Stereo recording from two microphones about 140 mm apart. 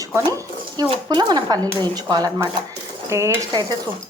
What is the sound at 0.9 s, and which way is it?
Speech, 30° right (ahead or behind).